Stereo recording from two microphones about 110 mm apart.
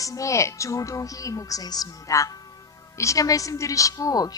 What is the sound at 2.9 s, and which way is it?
Speech, 30° left (ahead or behind).